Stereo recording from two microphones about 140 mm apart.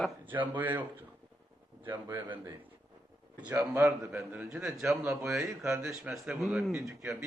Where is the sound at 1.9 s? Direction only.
15° right (ahead or behind).